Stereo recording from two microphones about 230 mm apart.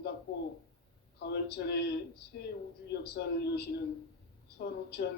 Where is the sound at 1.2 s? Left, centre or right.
Left.